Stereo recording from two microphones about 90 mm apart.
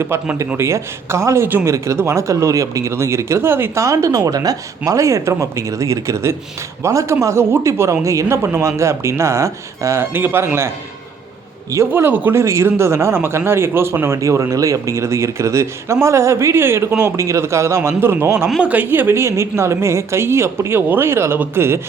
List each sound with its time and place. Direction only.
0.0 s speech: 30° right (ahead or behind)
1.5 s speech: 20° right (ahead or behind)
1.7 s speech: 35° right (ahead or behind)
11.9 s speech: 20° right (ahead or behind)